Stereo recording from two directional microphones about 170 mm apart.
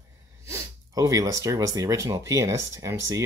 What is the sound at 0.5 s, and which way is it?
Speech, 20° right (ahead or behind).